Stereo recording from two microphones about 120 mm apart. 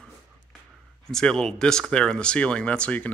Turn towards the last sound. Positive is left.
turn(degrees=10)  # may be behind; listen again after turning